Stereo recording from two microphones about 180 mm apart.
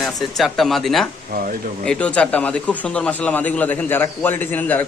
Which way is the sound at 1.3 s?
50° right (ahead or behind).